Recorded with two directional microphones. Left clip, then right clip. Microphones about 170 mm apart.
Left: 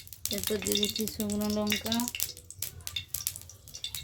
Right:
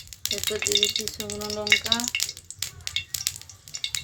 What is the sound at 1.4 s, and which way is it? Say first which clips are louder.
Frying: right 1 dB; 60° left (ahead or behind).